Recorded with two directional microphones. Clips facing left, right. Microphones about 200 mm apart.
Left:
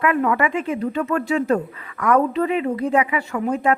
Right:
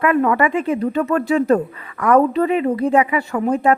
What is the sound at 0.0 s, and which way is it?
Speech, 40° right (ahead or behind).